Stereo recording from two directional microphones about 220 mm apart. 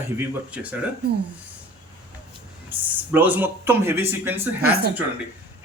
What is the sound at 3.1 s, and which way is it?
Speech, 10° right (ahead or behind).